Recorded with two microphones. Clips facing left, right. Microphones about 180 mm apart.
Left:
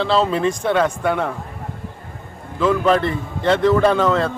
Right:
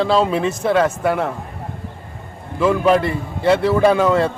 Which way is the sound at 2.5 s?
10° right (ahead or behind).